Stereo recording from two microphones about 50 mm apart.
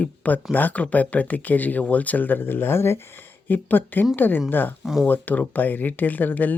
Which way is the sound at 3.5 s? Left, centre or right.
Left.